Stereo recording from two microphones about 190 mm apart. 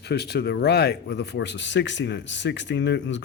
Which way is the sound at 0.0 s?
60° left (ahead or behind).